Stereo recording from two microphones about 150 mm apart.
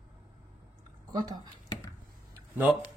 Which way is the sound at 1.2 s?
30° right (ahead or behind).